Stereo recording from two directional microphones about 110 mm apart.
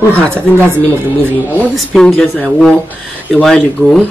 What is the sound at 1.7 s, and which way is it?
Speech, 5° left (ahead or behind).